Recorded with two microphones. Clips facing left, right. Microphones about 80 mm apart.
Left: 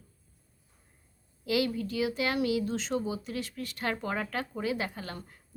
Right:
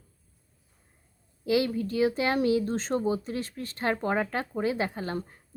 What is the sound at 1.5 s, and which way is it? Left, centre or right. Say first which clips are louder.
Speech: right 3 dB; right.